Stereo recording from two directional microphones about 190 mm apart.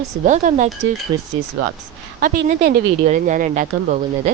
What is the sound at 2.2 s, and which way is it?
Speech, 50° right (ahead or behind).